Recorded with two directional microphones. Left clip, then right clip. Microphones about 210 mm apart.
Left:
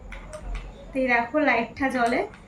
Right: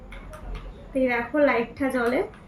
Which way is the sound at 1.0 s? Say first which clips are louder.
Left 1 dB; centre (ahead or behind).